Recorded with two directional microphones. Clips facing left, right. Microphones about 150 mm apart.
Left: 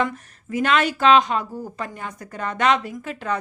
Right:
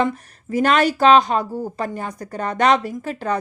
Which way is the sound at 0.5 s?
40° right (ahead or behind).